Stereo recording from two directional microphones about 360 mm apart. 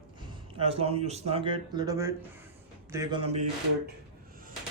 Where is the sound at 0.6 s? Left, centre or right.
Centre.